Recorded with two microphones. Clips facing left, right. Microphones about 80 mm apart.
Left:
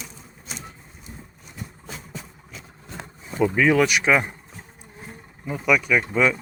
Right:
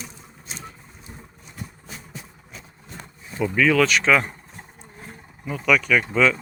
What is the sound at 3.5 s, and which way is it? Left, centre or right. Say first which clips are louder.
Speech: right 1 dB; left.